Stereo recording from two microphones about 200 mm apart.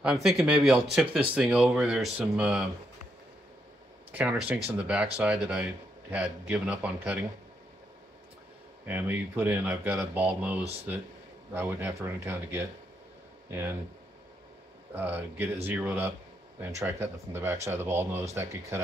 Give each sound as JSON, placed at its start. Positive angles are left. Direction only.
{"t": 0.0, "sound": "speech", "side_deg": 0}
{"t": 4.1, "sound": "speech", "side_deg": -5}
{"t": 8.8, "sound": "speech", "side_deg": -10}
{"t": 10.6, "sound": "speech", "side_deg": -30}
{"t": 11.5, "sound": "speech", "side_deg": -10}
{"t": 15.0, "sound": "speech", "side_deg": -10}